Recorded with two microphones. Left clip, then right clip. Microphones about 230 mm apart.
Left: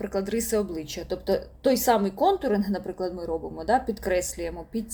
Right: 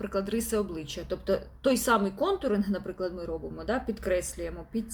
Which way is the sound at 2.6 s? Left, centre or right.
Right.